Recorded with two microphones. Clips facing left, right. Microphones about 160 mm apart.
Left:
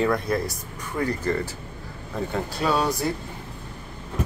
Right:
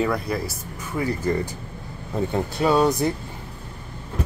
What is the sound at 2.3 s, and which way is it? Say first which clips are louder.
Speech: right 4 dB; 20° right (ahead or behind).